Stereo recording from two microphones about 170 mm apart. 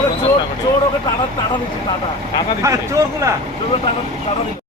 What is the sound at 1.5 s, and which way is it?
Speech, 30° left (ahead or behind).